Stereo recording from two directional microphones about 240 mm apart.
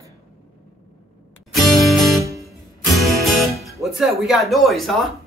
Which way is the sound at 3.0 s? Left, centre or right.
Centre.